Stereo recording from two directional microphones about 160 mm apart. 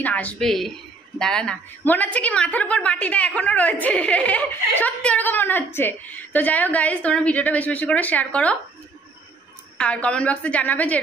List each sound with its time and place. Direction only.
0.0 s a woman's voice: 10° left (ahead or behind)
9.8 s a woman's voice: 10° left (ahead or behind)